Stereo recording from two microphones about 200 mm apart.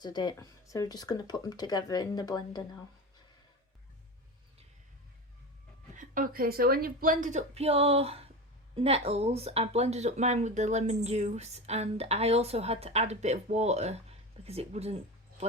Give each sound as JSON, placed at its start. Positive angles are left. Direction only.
{"t": 0.0, "sound": "speech", "side_deg": 20}
{"t": 5.9, "sound": "speech", "side_deg": -40}